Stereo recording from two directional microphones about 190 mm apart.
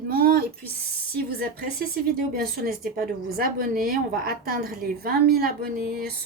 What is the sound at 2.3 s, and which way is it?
Speech, 50° right (ahead or behind).